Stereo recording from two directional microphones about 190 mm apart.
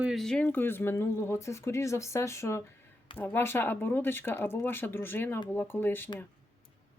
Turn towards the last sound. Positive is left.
turn(degrees=10)  # may be behind; listen again after turning